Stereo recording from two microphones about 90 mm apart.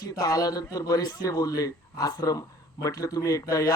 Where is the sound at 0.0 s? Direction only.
45° left (ahead or behind).